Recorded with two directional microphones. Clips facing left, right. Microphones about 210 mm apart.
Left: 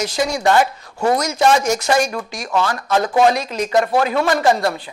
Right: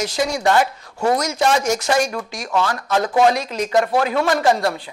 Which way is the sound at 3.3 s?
10° left (ahead or behind).